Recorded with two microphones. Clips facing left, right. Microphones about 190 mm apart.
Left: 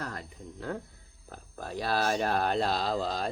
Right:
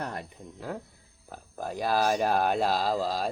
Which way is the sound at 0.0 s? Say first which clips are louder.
Right 3 dB; 20° right (ahead or behind).